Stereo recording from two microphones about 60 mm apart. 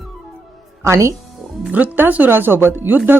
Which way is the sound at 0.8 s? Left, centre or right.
Right.